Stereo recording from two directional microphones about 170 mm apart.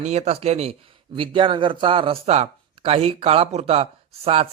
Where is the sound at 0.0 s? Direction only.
40° right (ahead or behind).